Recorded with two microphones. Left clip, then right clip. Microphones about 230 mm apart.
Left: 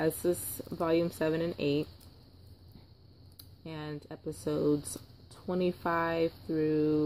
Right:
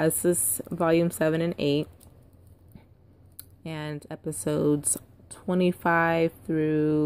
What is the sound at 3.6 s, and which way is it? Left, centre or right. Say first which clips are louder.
Speech: right 6 dB; right.